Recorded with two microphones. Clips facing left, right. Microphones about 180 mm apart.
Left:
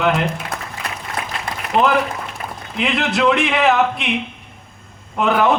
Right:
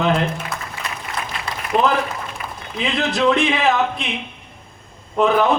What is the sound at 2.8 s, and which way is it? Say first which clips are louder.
A man's voice: left 1 dB; 65° left (ahead or behind).